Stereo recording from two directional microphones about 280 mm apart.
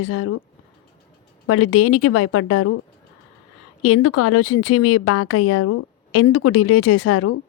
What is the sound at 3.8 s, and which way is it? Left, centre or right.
A woman's voice, left.